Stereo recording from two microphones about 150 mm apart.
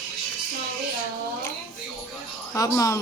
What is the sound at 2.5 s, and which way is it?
Speech, 20° left (ahead or behind).